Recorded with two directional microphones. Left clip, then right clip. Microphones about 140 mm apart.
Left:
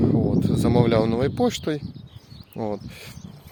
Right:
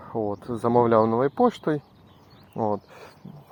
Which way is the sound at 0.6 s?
50° left (ahead or behind).